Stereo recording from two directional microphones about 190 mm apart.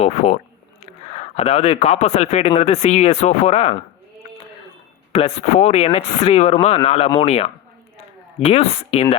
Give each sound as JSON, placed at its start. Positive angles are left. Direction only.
{"t": 0.0, "sound": "speech", "side_deg": 35}
{"t": 5.1, "sound": "speech", "side_deg": 35}